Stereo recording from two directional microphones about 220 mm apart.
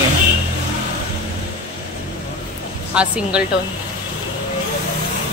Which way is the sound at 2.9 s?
5° right (ahead or behind).